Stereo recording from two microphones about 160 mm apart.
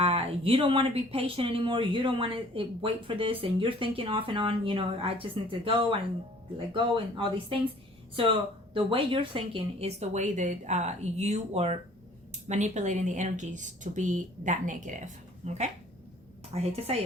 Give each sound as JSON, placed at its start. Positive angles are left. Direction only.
{"t": 0.0, "sound": "speech", "side_deg": -35}
{"t": 8.7, "sound": "a woman's voice", "side_deg": -35}